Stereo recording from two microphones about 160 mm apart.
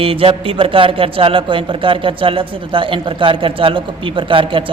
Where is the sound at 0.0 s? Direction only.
35° right (ahead or behind).